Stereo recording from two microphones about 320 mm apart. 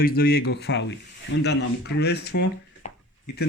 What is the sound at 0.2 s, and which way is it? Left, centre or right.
Speech, left.